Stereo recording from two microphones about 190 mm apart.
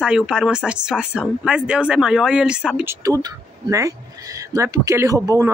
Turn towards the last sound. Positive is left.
turn(degrees=-20)  # may be behind; listen again after turning